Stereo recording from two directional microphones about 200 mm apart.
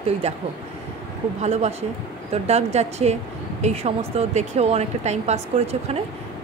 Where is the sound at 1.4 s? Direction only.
35° right (ahead or behind).